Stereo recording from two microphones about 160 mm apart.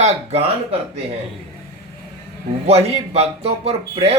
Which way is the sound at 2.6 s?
40° right (ahead or behind).